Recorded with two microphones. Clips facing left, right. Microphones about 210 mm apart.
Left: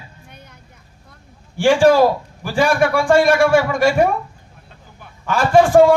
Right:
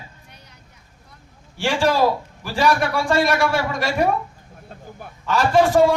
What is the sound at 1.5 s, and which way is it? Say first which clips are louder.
A man's voice: left 8 dB; 50° left (ahead or behind).